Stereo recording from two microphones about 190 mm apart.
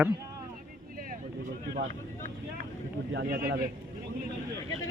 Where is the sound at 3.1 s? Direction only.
55° right (ahead or behind).